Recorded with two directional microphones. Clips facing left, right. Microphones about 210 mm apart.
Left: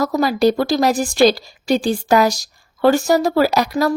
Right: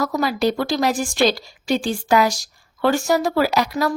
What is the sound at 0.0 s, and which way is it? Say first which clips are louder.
A woman's voice: left 4 dB; 40° left (ahead or behind).